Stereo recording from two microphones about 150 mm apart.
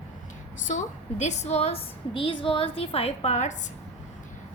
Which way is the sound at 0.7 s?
55° left (ahead or behind).